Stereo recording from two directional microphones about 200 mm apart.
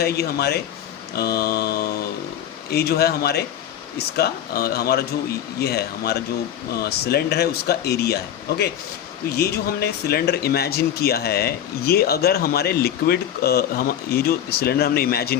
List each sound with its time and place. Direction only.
0.0 s speech: 50° left (ahead or behind)